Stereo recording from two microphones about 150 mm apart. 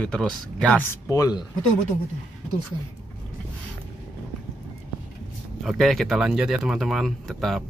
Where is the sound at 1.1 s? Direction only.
25° left (ahead or behind).